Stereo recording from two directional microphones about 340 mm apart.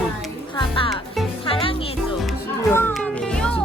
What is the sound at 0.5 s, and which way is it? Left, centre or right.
Music, centre.